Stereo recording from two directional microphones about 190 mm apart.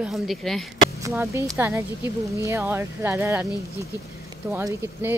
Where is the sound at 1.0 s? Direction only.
15° right (ahead or behind).